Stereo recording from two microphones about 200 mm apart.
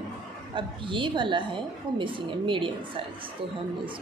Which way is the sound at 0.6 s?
25° right (ahead or behind).